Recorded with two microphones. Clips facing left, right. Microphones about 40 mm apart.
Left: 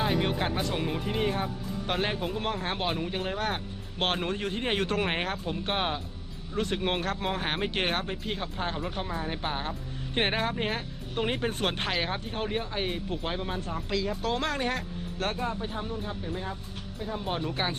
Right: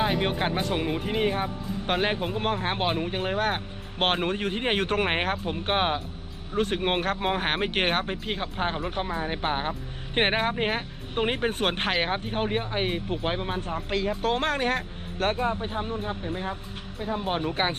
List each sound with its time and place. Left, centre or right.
0.0 s speech: right